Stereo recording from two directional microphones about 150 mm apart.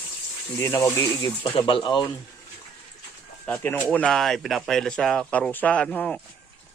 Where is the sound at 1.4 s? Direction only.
35° left (ahead or behind).